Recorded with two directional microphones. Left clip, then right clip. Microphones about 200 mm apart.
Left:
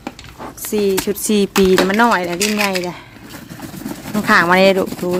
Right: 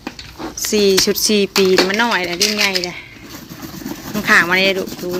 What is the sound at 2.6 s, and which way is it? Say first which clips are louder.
Vehicle: right 1 dB; 30° left (ahead or behind).